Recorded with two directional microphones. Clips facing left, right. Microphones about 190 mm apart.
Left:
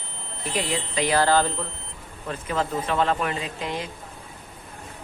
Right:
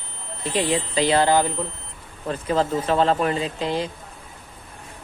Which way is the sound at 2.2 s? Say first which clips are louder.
Right 5 dB; 35° right (ahead or behind).